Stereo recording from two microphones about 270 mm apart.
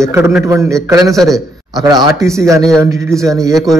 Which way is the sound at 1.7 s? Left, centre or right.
Centre.